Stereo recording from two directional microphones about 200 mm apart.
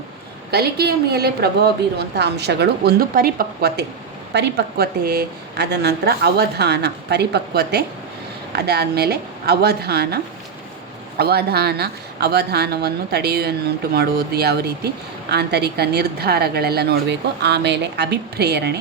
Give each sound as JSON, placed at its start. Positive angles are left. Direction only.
{"t": 0.5, "sound": "a woman's voice", "side_deg": -50}
{"t": 11.2, "sound": "a woman's voice", "side_deg": -55}